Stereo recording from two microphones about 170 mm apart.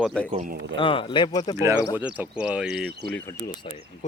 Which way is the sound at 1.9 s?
10° right (ahead or behind).